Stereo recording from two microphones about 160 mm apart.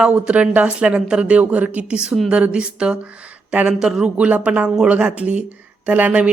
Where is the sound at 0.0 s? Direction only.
5° right (ahead or behind).